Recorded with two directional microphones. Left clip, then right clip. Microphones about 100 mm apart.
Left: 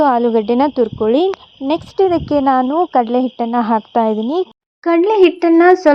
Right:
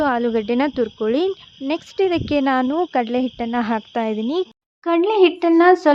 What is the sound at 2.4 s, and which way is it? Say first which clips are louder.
Speech: left 7 dB; 20° left (ahead or behind).